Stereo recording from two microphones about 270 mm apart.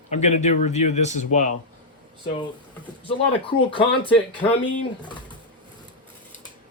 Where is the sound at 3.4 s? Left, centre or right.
Centre.